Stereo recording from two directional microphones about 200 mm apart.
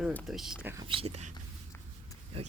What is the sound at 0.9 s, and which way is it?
Speech, 30° right (ahead or behind).